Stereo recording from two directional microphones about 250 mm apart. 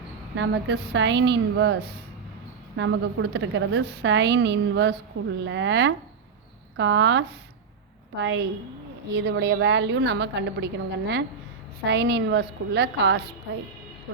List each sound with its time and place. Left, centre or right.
0.3 s a woman's voice: right
9.1 s a woman's voice: right